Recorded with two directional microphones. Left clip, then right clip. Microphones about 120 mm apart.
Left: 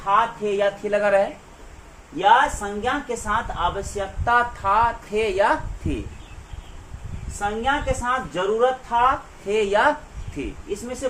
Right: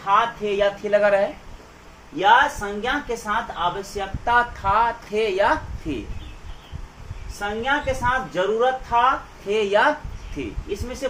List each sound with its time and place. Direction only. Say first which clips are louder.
0.0 s a woman's voice: even; 20° left (ahead or behind)
0.6 s a woman's voice: right 3 dB; 35° left (ahead or behind)
2.1 s a woman's voice: even; 25° left (ahead or behind)
4.3 s a woman's voice: even; 40° left (ahead or behind)
7.3 s a woman's voice: even; 25° left (ahead or behind)
9.5 s a woman's voice: even; 40° left (ahead or behind)